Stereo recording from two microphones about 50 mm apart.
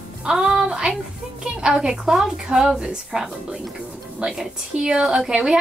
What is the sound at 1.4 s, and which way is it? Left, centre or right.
A woman's voice, centre.